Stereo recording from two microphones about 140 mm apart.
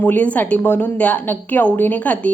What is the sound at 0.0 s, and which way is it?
A woman's voice, 10° left (ahead or behind).